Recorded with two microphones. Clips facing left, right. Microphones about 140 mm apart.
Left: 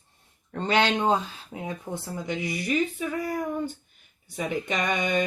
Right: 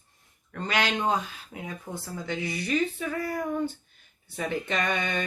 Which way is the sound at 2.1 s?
15° left (ahead or behind).